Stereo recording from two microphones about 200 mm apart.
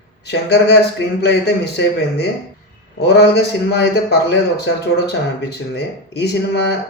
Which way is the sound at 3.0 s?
55° left (ahead or behind).